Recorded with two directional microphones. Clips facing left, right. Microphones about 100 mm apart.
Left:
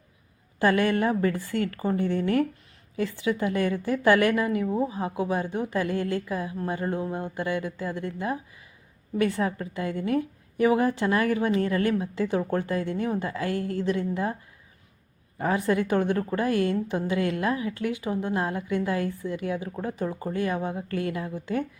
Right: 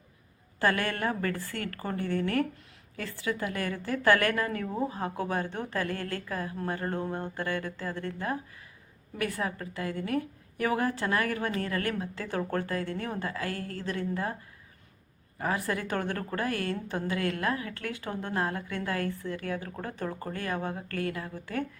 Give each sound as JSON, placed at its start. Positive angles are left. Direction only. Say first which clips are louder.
{"t": 0.6, "sound": "a woman's voice", "louder": "left 6 dB", "side_deg": 20}
{"t": 15.4, "sound": "a woman's voice", "louder": "left 6 dB", "side_deg": 25}